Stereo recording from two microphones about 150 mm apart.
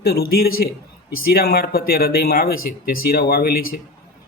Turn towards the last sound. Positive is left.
turn(degrees=75)  # may be behind; listen again after turning